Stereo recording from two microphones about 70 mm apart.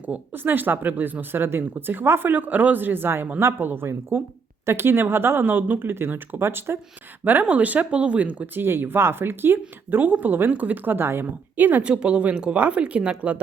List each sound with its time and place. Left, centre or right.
0.0 s speech: right
7.3 s speech: right
8.6 s speech: right; by 13.4 s centre